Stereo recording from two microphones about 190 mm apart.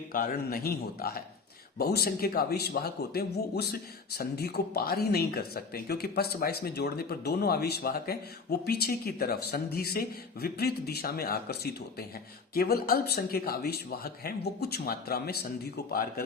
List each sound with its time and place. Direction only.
0.1 s speech: 50° left (ahead or behind)